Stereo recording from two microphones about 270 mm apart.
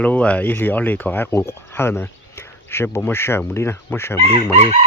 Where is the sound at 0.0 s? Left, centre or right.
Centre.